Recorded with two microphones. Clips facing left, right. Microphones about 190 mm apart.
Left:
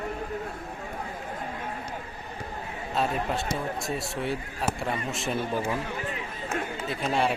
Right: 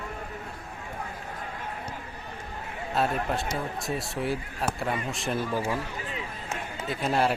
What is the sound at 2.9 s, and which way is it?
Speech, centre (ahead or behind).